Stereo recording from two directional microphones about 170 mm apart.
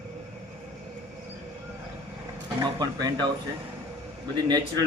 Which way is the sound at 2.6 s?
25° right (ahead or behind).